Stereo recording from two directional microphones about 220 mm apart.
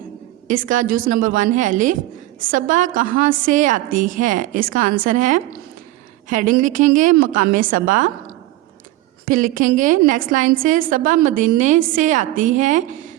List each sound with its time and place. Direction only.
0.4 s a woman's voice: 40° right (ahead or behind)
9.2 s a woman's voice: 40° right (ahead or behind)